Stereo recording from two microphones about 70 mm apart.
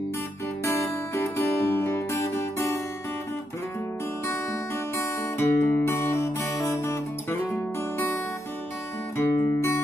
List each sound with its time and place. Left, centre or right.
0.7 s music: left
4.9 s music: left